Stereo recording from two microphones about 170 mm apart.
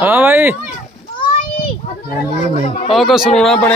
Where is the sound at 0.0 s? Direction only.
15° right (ahead or behind).